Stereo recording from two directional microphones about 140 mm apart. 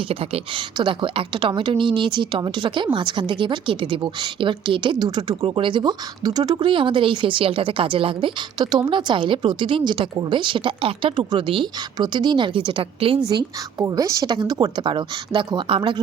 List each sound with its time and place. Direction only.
0.1 s a woman's voice: 40° right (ahead or behind)
13.2 s a woman's voice: 25° right (ahead or behind)